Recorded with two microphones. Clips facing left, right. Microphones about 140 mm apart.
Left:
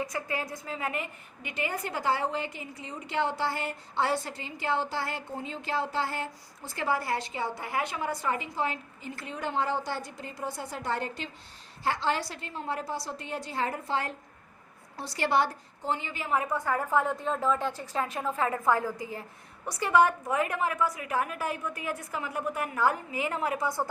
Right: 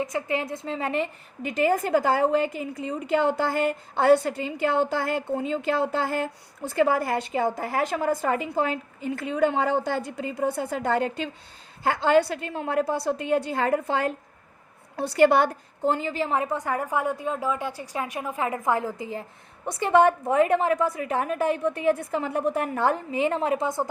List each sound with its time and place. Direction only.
0.0 s a woman's voice: 20° right (ahead or behind); by 16.1 s 45° right (ahead or behind)
16.1 s a woman's voice: 30° right (ahead or behind)